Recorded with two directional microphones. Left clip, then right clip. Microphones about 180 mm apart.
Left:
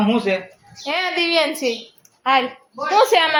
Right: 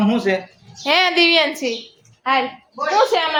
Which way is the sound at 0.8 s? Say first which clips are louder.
Right 6 dB; 65° right (ahead or behind).